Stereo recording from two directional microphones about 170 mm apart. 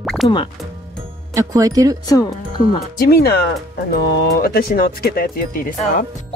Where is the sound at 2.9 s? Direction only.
65° left (ahead or behind).